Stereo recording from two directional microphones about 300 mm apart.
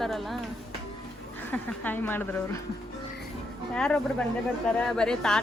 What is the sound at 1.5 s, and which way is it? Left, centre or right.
Speech, centre.